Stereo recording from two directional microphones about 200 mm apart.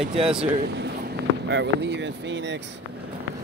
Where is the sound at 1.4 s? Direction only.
60° right (ahead or behind).